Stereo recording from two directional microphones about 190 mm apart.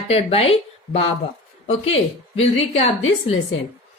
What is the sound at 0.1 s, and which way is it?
Speech, 30° left (ahead or behind).